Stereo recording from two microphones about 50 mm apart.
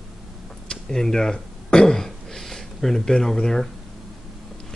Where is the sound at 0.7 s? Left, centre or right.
Centre.